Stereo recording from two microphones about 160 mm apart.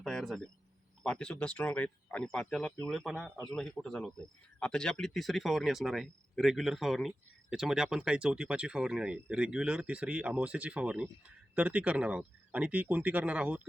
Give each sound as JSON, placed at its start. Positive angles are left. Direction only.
{"t": 0.0, "sound": "speech", "side_deg": 0}